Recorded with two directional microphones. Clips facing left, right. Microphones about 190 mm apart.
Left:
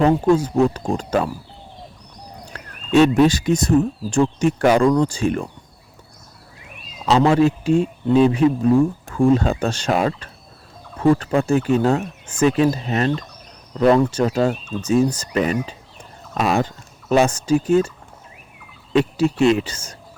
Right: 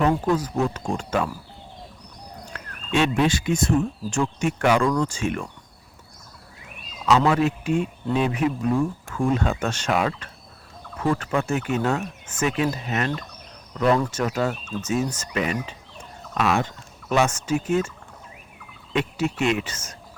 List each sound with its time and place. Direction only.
0.0 s speech: 30° left (ahead or behind)
2.5 s speech: 40° left (ahead or behind)
7.0 s speech: 30° left (ahead or behind)
18.9 s speech: 35° left (ahead or behind)